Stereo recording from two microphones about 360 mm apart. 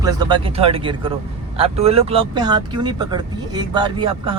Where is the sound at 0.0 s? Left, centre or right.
Centre.